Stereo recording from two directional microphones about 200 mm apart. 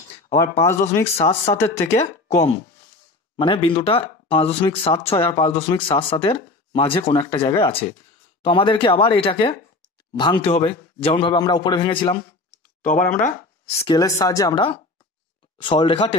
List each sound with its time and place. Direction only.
1.1 s a man's voice: 30° left (ahead or behind)
12.8 s speech: 40° left (ahead or behind)
13.7 s a man's voice: 20° left (ahead or behind)